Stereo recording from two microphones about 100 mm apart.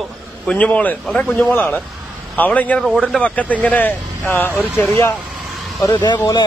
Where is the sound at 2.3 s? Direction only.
15° left (ahead or behind).